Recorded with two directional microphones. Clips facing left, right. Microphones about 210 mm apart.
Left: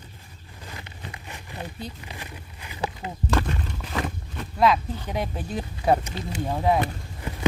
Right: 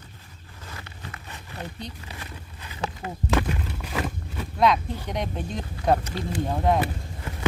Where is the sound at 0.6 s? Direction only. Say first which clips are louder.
Left 1 dB; 15° left (ahead or behind).